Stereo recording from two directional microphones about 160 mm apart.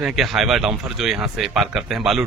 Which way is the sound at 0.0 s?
Centre (ahead or behind).